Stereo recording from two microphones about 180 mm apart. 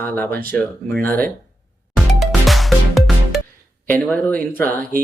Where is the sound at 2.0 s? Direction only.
Centre (ahead or behind).